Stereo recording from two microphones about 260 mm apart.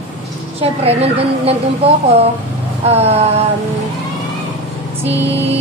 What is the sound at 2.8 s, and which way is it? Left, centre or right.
Speech, right.